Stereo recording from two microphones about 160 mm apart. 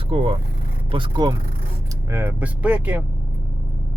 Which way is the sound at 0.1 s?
35° right (ahead or behind).